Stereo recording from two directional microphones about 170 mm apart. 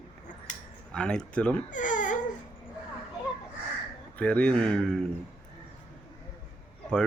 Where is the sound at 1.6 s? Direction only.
50° left (ahead or behind).